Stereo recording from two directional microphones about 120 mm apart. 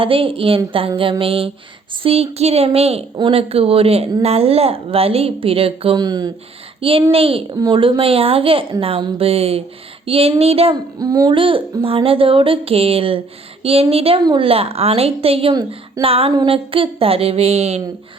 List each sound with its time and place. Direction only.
0.0 s speech: 50° right (ahead or behind)
6.0 s speech: 35° right (ahead or behind)
6.7 s a child's voice: 50° right (ahead or behind)
7.5 s speech: 40° right (ahead or behind); by 10.8 s 55° right (ahead or behind)
11.0 s speech: 30° right (ahead or behind)
11.3 s speech: 45° right (ahead or behind)